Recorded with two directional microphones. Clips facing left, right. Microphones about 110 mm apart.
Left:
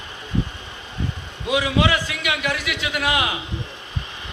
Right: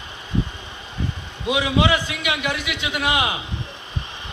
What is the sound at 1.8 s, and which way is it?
A man's voice, 25° right (ahead or behind).